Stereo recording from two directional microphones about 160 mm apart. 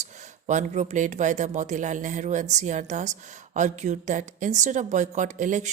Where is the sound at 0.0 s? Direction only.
50° right (ahead or behind).